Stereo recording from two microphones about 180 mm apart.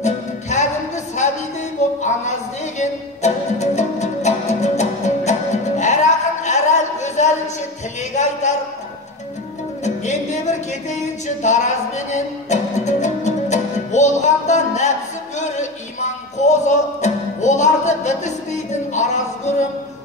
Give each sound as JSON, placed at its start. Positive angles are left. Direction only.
{"t": 0.0, "sound": "music", "side_deg": 40}
{"t": 8.0, "sound": "a man's voice", "side_deg": 40}
{"t": 9.8, "sound": "music", "side_deg": 40}